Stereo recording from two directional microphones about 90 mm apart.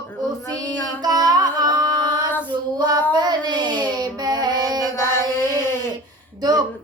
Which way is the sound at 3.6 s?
50° right (ahead or behind).